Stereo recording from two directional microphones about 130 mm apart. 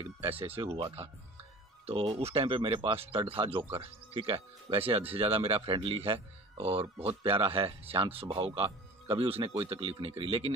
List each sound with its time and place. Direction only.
0.4 s speech: 45° right (ahead or behind)
1.9 s speech: 50° right (ahead or behind)